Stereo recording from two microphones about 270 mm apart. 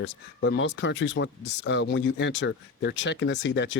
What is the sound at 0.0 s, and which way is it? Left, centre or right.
Speech, left.